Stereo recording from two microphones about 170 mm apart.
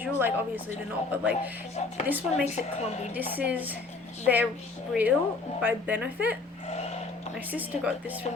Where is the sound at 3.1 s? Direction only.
10° right (ahead or behind).